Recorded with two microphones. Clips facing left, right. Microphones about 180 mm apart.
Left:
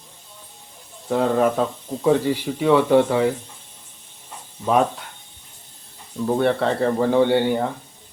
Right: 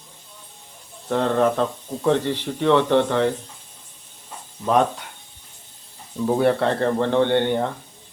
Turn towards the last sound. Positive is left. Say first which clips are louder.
# left 1 dB
turn(degrees=5)  # may be behind; listen again after turning